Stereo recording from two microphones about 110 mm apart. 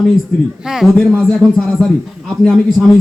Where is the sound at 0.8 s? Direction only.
Centre (ahead or behind).